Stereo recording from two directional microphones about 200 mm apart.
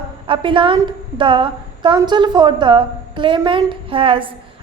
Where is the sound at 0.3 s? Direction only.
25° right (ahead or behind).